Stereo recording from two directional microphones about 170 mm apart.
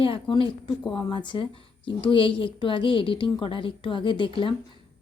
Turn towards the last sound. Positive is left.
turn(degrees=30)  # may be behind; listen again after turning